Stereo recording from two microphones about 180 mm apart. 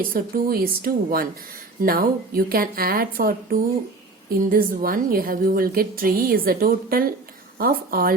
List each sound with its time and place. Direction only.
0.1 s a woman's voice: 55° right (ahead or behind)